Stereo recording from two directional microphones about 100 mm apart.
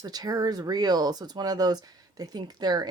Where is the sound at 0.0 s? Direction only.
40° right (ahead or behind).